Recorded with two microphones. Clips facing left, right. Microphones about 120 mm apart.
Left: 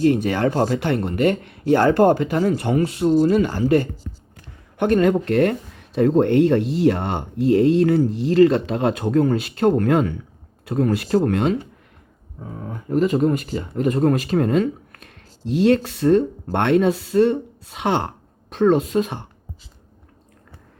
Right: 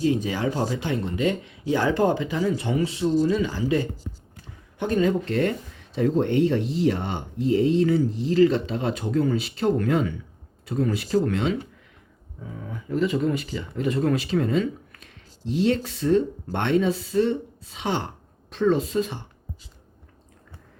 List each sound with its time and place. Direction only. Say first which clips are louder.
0.0 s speech: left 6 dB; 65° left (ahead or behind)